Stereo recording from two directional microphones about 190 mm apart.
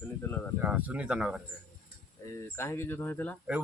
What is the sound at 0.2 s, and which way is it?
Speech, 10° left (ahead or behind).